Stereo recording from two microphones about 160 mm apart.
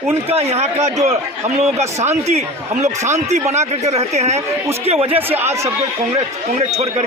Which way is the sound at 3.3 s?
45° right (ahead or behind).